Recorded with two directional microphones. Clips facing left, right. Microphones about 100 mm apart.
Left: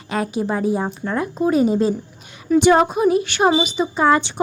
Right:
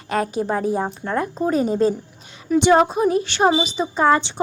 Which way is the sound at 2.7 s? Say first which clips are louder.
Even; 10° left (ahead or behind).